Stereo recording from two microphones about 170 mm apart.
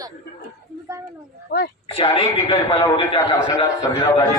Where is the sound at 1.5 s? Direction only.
60° left (ahead or behind).